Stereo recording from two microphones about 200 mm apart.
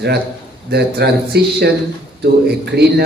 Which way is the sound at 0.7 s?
55° right (ahead or behind).